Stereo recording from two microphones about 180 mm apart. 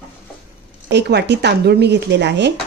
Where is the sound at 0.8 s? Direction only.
70° right (ahead or behind).